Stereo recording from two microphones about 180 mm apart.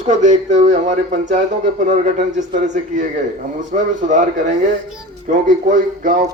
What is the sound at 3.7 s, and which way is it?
Speech, 45° right (ahead or behind).